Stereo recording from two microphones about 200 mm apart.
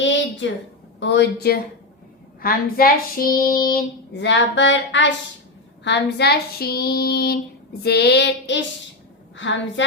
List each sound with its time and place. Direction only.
0.0 s a sound: 65° left (ahead or behind)
0.9 s speech: 60° left (ahead or behind)
2.4 s child singing: 45° left (ahead or behind)
9.3 s a woman's voice: 65° left (ahead or behind)